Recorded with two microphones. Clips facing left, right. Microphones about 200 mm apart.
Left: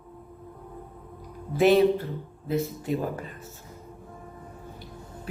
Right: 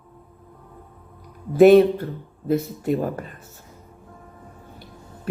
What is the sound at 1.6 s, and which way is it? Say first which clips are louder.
Speech: right 7 dB; 50° right (ahead or behind).